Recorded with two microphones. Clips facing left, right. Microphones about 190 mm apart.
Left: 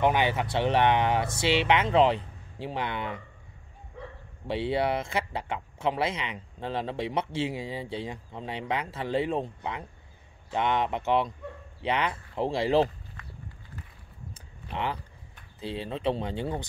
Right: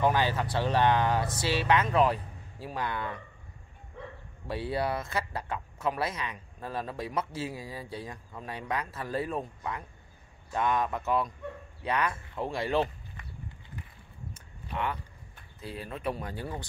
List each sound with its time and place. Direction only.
0.0 s speech: 20° left (ahead or behind)
4.5 s speech: 25° left (ahead or behind)
14.7 s speech: 25° left (ahead or behind)